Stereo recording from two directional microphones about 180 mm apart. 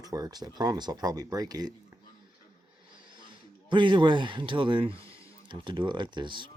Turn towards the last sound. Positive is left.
turn(degrees=-25)  # may be behind; listen again after turning